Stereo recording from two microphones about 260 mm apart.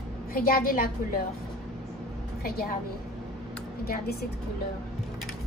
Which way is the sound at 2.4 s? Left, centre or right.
Left.